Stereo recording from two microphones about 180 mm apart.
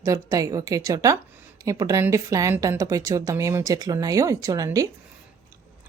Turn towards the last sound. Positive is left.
turn(degrees=-20)  # may be behind; listen again after turning